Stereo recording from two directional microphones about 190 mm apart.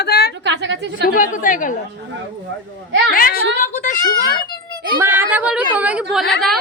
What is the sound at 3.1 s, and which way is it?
Speech, 50° left (ahead or behind).